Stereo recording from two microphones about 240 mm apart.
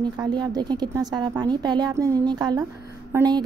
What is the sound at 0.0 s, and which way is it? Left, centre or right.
A woman's voice, centre.